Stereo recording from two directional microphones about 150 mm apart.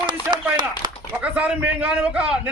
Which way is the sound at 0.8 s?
30° right (ahead or behind).